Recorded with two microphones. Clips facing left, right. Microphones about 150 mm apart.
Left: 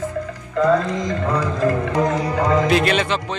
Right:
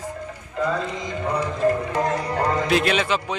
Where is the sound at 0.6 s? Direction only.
90° left.